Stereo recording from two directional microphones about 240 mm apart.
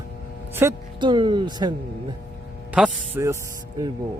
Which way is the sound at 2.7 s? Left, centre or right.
Centre.